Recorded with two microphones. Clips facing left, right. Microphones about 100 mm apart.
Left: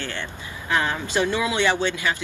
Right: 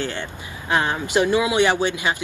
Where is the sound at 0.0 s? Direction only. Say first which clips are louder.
Right 4 dB; 15° right (ahead or behind).